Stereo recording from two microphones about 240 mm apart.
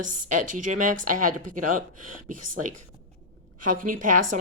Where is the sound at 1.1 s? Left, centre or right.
Right.